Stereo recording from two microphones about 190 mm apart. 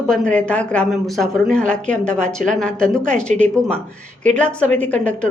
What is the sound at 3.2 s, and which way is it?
Speech, 35° right (ahead or behind).